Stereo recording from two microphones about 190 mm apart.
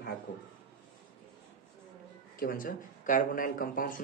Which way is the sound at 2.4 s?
45° left (ahead or behind).